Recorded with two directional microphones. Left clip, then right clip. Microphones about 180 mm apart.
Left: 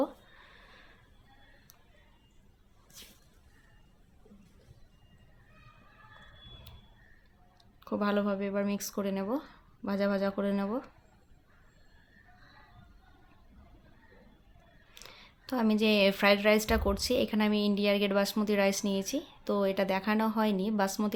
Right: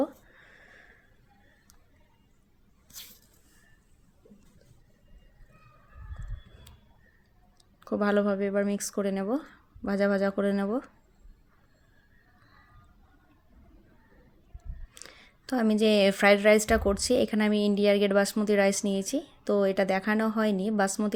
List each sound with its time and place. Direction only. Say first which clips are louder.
7.8 s a woman's voice: right 5 dB; 20° right (ahead or behind)
14.9 s a woman's voice: right 2 dB; 20° right (ahead or behind)